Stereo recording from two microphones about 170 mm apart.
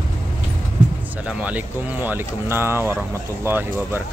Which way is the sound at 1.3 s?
10° right (ahead or behind).